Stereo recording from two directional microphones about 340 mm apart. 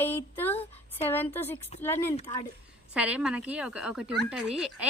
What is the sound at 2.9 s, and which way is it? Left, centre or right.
A woman's voice, centre.